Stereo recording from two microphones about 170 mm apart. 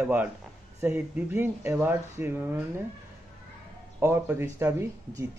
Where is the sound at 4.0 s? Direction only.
15° right (ahead or behind).